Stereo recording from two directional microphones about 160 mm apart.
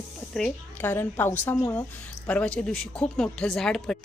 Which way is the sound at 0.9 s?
15° left (ahead or behind).